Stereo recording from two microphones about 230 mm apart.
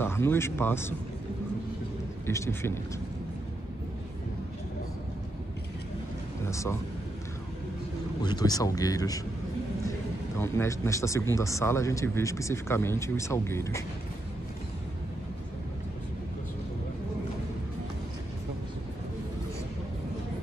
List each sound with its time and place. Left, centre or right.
0.0 s speech: centre
2.2 s speech: centre
6.4 s speech: centre
8.2 s speech: centre